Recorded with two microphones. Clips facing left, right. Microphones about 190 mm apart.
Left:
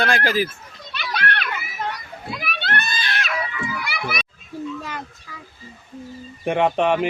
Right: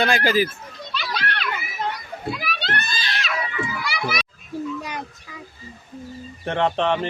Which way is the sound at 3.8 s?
55° left (ahead or behind).